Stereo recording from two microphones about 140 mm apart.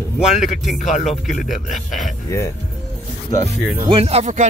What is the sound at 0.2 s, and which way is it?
Speech, 55° left (ahead or behind).